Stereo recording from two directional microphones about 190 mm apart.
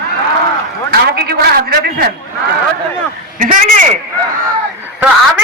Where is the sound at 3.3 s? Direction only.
45° right (ahead or behind).